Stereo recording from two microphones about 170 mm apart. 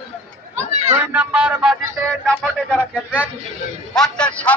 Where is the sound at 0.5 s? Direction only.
40° right (ahead or behind).